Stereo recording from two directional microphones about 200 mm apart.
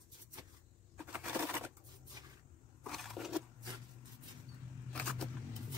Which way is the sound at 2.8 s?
Centre (ahead or behind).